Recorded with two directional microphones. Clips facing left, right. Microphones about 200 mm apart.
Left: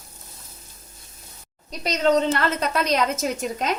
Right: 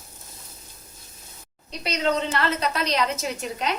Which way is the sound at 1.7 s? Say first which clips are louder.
Left 4 dB; 45° left (ahead or behind).